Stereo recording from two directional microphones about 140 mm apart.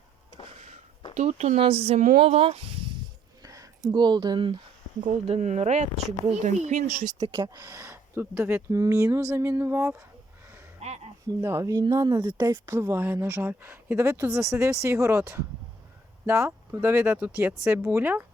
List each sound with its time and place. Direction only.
0.4 s a sound: 55° right (ahead or behind)
1.1 s speech: 55° right (ahead or behind)
3.4 s speech: 25° right (ahead or behind)
5.0 s speech: 55° right (ahead or behind)
7.3 s speech: 30° right (ahead or behind)
10.8 s a sound: 50° right (ahead or behind)
11.3 s speech: 20° right (ahead or behind)
16.2 s speech: 20° right (ahead or behind)